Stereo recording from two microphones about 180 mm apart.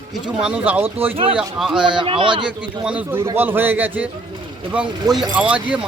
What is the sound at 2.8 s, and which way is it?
Speech, 10° right (ahead or behind).